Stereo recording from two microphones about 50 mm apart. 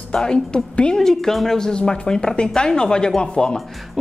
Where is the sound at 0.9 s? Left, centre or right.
Centre.